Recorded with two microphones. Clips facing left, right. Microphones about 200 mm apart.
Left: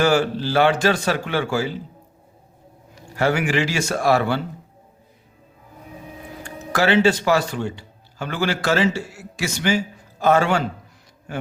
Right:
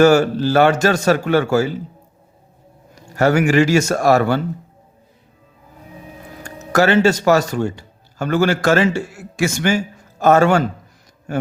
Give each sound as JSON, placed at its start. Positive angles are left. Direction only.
{"t": 0.0, "sound": "speech", "side_deg": -45}
{"t": 2.9, "sound": "speech", "side_deg": -45}
{"t": 6.7, "sound": "a man's voice", "side_deg": -45}